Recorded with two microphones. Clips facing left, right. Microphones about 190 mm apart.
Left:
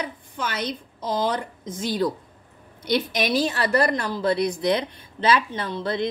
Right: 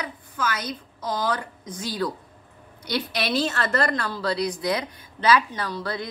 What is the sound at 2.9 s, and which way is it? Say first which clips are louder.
A woman's voice: left 3 dB; 15° left (ahead or behind).